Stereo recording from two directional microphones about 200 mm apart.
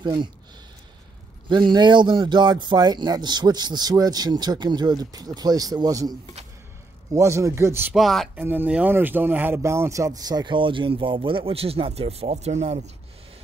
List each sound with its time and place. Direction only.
0.0 s speech: 20° right (ahead or behind)
1.5 s speech: 20° right (ahead or behind)
7.2 s speech: 15° right (ahead or behind); by 12.9 s 35° right (ahead or behind)